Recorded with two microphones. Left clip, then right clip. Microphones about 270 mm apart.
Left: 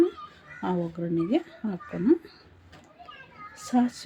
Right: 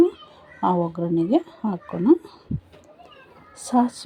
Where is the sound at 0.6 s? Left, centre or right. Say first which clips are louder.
Right 8 dB; centre.